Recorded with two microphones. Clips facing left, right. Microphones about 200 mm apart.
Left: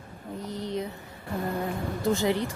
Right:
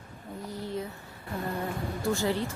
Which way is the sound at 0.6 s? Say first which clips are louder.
Left 3 dB; 20° left (ahead or behind).